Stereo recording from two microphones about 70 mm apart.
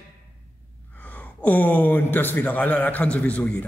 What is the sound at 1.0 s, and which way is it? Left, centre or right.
A man's voice, left.